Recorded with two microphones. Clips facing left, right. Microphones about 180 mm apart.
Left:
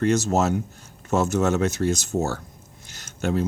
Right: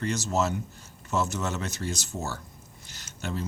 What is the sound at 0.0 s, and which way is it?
Speech, 50° left (ahead or behind).